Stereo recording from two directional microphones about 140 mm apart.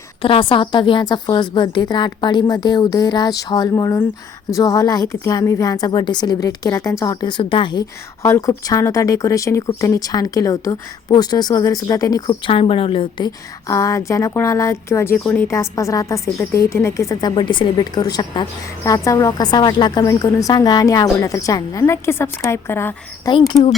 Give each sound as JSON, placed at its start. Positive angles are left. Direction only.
{"t": 0.2, "sound": "a woman's voice", "side_deg": 40}
{"t": 12.5, "sound": "a woman's voice", "side_deg": 40}
{"t": 13.7, "sound": "a woman's voice", "side_deg": 20}
{"t": 15.2, "sound": "a woman's voice", "side_deg": 5}
{"t": 15.4, "sound": "a woman's voice", "side_deg": 20}